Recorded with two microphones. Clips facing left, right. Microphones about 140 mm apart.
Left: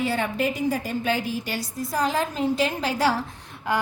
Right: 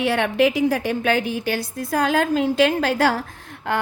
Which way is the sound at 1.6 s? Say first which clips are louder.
Right 3 dB; 60° right (ahead or behind).